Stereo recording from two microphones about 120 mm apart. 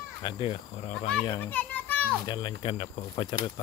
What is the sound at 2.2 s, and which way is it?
Speech, 35° left (ahead or behind).